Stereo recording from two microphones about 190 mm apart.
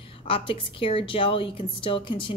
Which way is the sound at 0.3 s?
30° left (ahead or behind).